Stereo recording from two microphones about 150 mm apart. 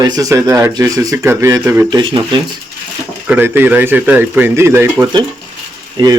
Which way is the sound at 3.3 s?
15° right (ahead or behind).